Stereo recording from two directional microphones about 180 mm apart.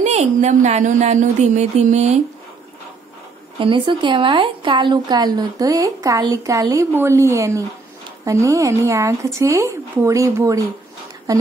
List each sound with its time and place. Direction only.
0.0 s speech: 40° right (ahead or behind)
3.5 s a woman's voice: 30° right (ahead or behind)